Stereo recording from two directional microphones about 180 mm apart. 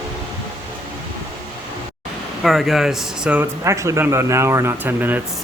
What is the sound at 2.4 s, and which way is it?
Speech, centre (ahead or behind).